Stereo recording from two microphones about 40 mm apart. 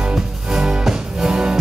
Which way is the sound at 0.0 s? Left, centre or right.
Right.